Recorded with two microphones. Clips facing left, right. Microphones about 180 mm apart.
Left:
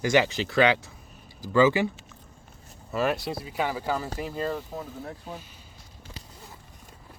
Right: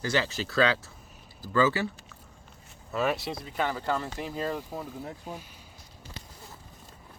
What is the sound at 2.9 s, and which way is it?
Speech, centre (ahead or behind).